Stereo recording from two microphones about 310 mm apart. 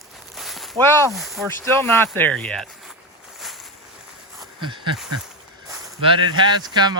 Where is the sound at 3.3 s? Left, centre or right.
Centre.